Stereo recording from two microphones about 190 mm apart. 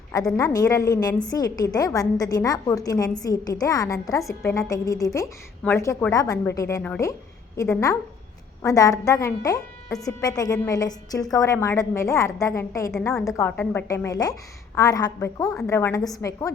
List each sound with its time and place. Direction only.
0.3 s a woman's voice: 20° left (ahead or behind)